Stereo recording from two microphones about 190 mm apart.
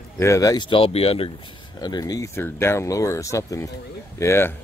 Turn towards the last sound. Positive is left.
turn(degrees=15)  # may be behind; listen again after turning